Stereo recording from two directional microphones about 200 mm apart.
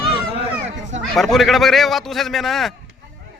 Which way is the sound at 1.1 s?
Centre (ahead or behind).